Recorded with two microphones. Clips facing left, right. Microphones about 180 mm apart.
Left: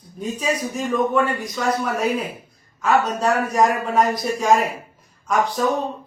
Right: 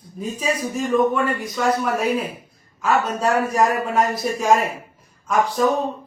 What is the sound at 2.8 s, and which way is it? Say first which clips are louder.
A man's voice: left 1 dB; centre (ahead or behind).